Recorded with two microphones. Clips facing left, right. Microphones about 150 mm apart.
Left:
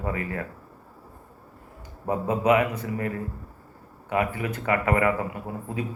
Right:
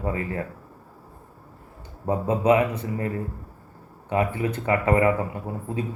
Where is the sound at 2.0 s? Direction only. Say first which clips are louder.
Right 2 dB; 25° right (ahead or behind).